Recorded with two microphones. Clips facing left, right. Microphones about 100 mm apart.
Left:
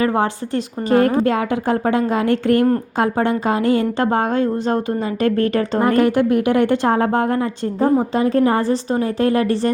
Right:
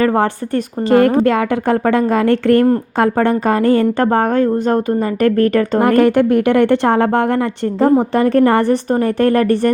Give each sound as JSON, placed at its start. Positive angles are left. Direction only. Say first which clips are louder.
{"t": 0.2, "sound": "a woman's voice", "louder": "right 3 dB", "side_deg": -65}